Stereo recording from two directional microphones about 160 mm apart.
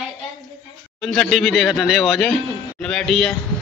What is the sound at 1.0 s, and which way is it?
Speech, centre (ahead or behind).